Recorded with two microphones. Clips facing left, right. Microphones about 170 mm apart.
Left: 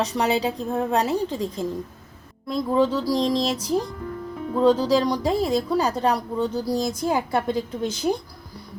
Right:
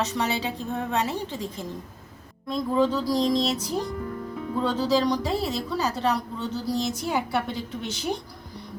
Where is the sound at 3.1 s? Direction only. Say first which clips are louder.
Left 1 dB; 30° left (ahead or behind).